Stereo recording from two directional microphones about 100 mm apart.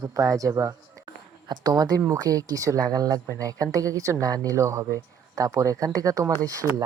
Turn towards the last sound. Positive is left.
turn(degrees=-35)  # may be behind; listen again after turning